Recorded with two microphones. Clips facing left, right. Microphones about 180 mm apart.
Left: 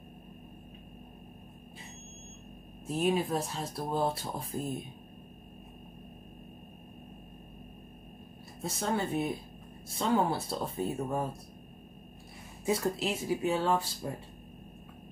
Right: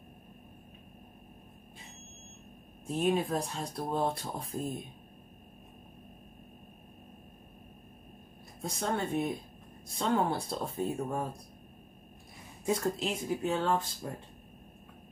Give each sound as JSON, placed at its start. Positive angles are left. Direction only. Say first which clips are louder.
{"t": 2.9, "sound": "speech", "louder": "even", "side_deg": 5}
{"t": 8.6, "sound": "speech", "louder": "left 1 dB", "side_deg": 0}
{"t": 12.6, "sound": "speech", "louder": "left 1 dB", "side_deg": 5}